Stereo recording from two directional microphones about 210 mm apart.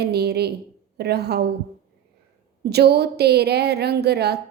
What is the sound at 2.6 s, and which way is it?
Music, 50° right (ahead or behind).